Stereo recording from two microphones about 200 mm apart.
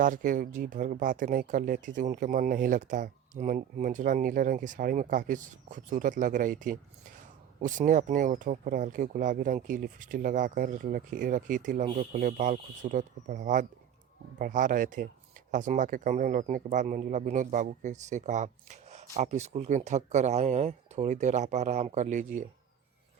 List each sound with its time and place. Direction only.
0.0 s speech: 40° right (ahead or behind)